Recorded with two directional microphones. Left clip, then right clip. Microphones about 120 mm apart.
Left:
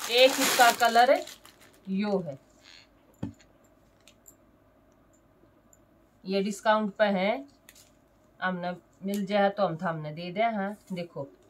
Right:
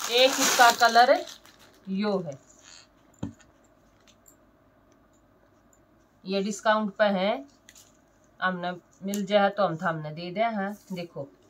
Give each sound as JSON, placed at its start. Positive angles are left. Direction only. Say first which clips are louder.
{"t": 0.0, "sound": "speech", "louder": "even", "side_deg": 5}
{"t": 0.5, "sound": "speech", "louder": "right 2 dB", "side_deg": 15}
{"t": 0.7, "sound": "speech", "louder": "right 2 dB", "side_deg": 5}
{"t": 2.6, "sound": "a sound", "louder": "right 1 dB", "side_deg": -5}
{"t": 6.2, "sound": "speech", "louder": "right 1 dB", "side_deg": 0}